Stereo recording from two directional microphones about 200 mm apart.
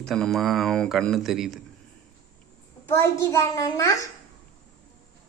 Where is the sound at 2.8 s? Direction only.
15° left (ahead or behind).